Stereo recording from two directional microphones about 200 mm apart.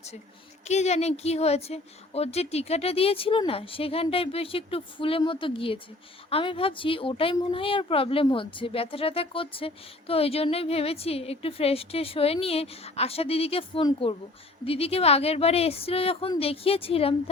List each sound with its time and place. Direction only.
0.6 s speech: 35° left (ahead or behind)